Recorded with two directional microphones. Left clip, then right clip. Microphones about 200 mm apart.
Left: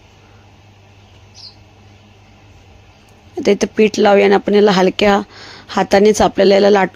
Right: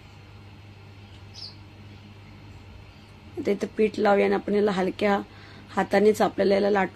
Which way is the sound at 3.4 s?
40° left (ahead or behind).